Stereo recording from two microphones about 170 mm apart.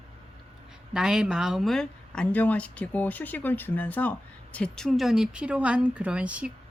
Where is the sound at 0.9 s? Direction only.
5° right (ahead or behind).